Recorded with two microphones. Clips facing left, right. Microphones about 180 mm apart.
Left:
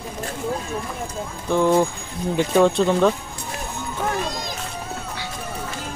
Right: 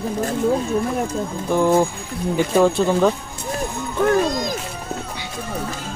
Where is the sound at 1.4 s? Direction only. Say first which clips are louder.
Right 1 dB; 10° right (ahead or behind).